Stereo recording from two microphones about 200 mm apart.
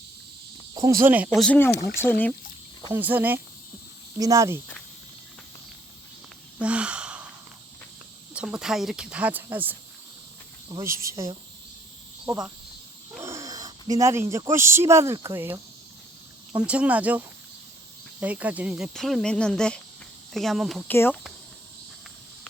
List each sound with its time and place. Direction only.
0.7 s speech: 15° right (ahead or behind)
1.3 s speech: 5° left (ahead or behind)
2.9 s cricket: 10° right (ahead or behind)
6.6 s a sound: 5° right (ahead or behind)
8.3 s speech: 5° right (ahead or behind)
10.7 s cricket: 15° right (ahead or behind)
12.2 s speech: 5° right (ahead or behind)
16.6 s cricket: 5° right (ahead or behind)
18.2 s speech: 5° right (ahead or behind)
20.9 s speech: 10° left (ahead or behind)